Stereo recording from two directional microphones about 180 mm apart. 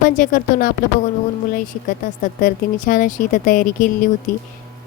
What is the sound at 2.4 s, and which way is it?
Speech, 45° left (ahead or behind).